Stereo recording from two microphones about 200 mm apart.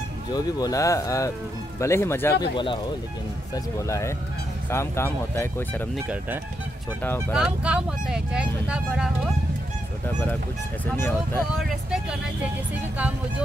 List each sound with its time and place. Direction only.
0.3 s speech: 20° left (ahead or behind)
2.5 s speech: 25° left (ahead or behind)
5.9 s speech: 5° right (ahead or behind)
11.0 s speech: 10° left (ahead or behind)
11.5 s speech: centre (ahead or behind)